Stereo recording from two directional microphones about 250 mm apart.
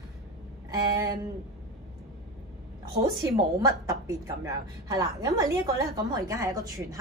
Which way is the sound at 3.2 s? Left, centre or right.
Centre.